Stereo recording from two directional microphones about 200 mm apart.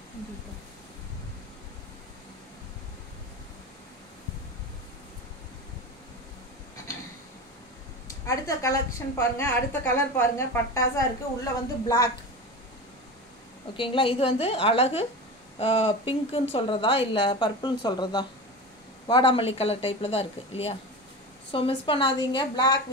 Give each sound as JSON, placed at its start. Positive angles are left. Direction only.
{"t": 8.3, "sound": "a woman's voice", "side_deg": 15}
{"t": 13.7, "sound": "speech", "side_deg": 25}